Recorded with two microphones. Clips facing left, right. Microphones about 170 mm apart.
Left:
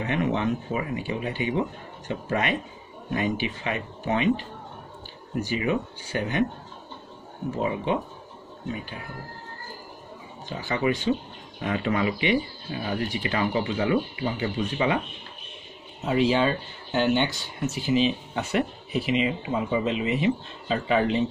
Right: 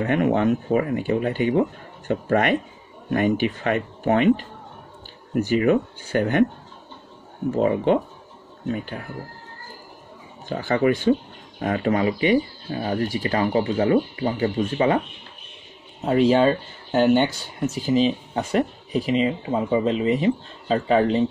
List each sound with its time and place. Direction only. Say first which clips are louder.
0.0 s speech: right 6 dB; 50° right (ahead or behind)
5.5 s speech: right 8 dB; 50° right (ahead or behind)
7.5 s speech: right 7 dB; 55° right (ahead or behind)
10.5 s speech: right 6 dB; 55° right (ahead or behind)
16.1 s speech: right 5 dB; 40° right (ahead or behind)